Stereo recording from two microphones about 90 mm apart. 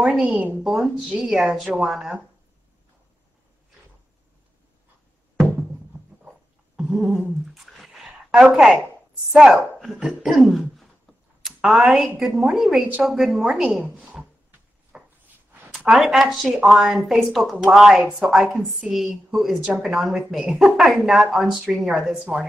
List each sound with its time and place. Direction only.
0.2 s a woman's voice: 15° right (ahead or behind)
0.7 s a woman's voice: 5° right (ahead or behind)
6.8 s a sound: 5° right (ahead or behind)
9.3 s a woman's voice: 5° right (ahead or behind)
14.9 s a sound: 5° right (ahead or behind)
15.9 s a woman's voice: 5° right (ahead or behind)